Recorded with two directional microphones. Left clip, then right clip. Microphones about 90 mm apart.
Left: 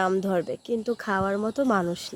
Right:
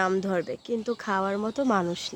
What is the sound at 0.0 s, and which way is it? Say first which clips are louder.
Speech: left 1 dB; 5° left (ahead or behind).